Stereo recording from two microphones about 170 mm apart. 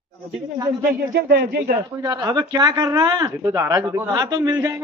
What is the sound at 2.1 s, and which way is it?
Speech, 20° right (ahead or behind).